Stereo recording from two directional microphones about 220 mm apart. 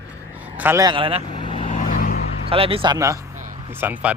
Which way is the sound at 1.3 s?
25° left (ahead or behind).